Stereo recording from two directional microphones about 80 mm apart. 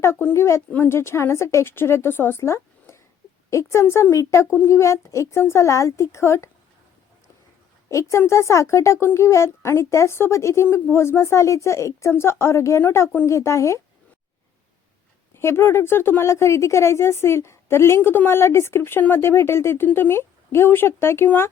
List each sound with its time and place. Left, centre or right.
0.0 s a woman's voice: left
7.9 s a woman's voice: left
15.4 s a woman's voice: left